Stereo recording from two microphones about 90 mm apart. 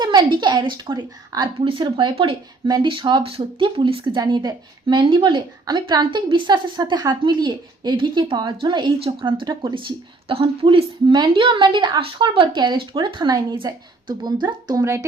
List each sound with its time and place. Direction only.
0.0 s a woman's voice: 55° right (ahead or behind)
1.6 s speech: 65° right (ahead or behind)
4.2 s speech: 50° right (ahead or behind)
5.0 s speech: 70° right (ahead or behind)
5.6 s speech: 50° right (ahead or behind)
6.2 s a woman's voice: 65° right (ahead or behind); by 10.8 s 80° right
11.1 s a woman's voice: 60° right (ahead or behind); by 15.0 s 35° right (ahead or behind)